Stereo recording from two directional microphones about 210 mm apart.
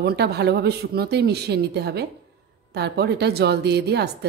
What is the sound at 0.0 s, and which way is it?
A woman's voice, 50° right (ahead or behind).